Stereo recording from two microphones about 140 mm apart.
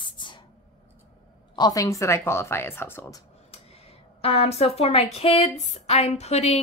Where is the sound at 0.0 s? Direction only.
35° left (ahead or behind).